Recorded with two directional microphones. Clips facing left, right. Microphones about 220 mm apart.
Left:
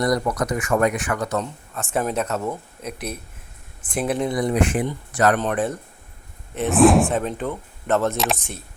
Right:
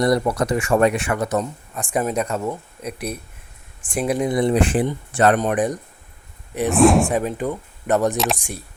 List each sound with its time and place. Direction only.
0.0 s speech: 30° right (ahead or behind); by 2.5 s 10° right (ahead or behind)
3.8 s speech: 5° left (ahead or behind)
4.0 s speech: 10° right (ahead or behind)
4.3 s speech: 25° right (ahead or behind)
5.4 s speech: 15° right (ahead or behind)
6.7 s speech: centre (ahead or behind); by 8.1 s 15° right (ahead or behind)
8.1 s speech: centre (ahead or behind)